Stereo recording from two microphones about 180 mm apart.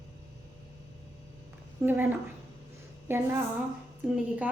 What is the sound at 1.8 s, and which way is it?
A woman's voice, 10° right (ahead or behind).